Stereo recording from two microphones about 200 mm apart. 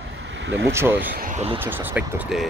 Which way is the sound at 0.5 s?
60° right (ahead or behind).